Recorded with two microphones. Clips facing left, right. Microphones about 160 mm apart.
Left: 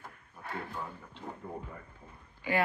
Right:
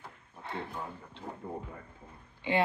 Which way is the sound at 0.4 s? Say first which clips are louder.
Right 1 dB; 25° right (ahead or behind).